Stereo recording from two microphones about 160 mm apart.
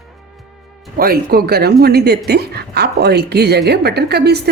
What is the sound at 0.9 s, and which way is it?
Speech, 70° right (ahead or behind).